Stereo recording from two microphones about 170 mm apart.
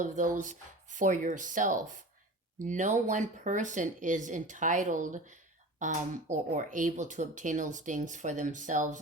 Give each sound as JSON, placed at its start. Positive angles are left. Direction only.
{"t": 0.0, "sound": "speech", "side_deg": -50}